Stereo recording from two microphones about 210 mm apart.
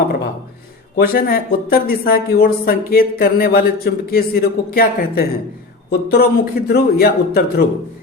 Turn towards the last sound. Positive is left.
turn(degrees=50)  # may be behind; listen again after turning